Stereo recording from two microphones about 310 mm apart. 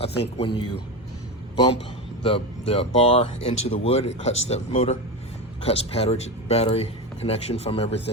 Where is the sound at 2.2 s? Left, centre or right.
Centre.